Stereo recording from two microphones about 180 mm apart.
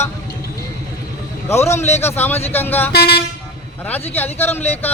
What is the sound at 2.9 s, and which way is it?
Speech, 65° left (ahead or behind).